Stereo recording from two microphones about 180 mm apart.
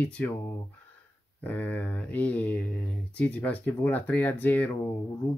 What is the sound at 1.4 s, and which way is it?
Speech, 10° left (ahead or behind).